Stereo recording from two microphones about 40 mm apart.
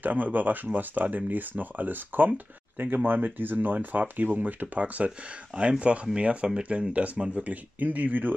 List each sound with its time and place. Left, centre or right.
0.0 s speech: right
7.3 s speech: right